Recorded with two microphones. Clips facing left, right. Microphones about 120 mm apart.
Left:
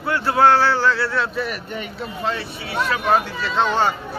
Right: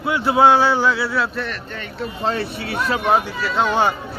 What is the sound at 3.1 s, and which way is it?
Speech, 15° right (ahead or behind).